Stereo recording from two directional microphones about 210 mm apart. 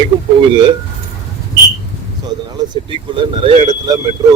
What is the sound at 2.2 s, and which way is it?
Speech, 20° right (ahead or behind).